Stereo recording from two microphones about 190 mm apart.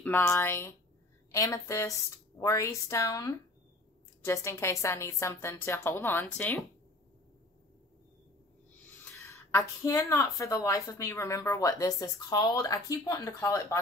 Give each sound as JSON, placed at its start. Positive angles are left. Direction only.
{"t": 0.0, "sound": "a woman's voice", "side_deg": 10}
{"t": 9.1, "sound": "a woman's voice", "side_deg": 15}